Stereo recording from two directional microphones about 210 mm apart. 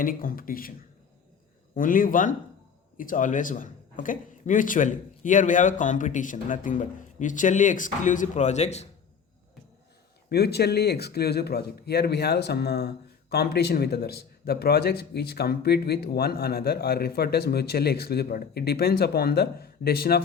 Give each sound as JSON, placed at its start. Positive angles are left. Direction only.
{"t": 0.0, "sound": "a man's voice", "side_deg": 40}
{"t": 1.7, "sound": "a man's voice", "side_deg": 40}
{"t": 10.2, "sound": "a man's voice", "side_deg": 50}